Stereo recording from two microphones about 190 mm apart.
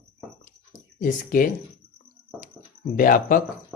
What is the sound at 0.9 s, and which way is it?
Speech, 45° left (ahead or behind).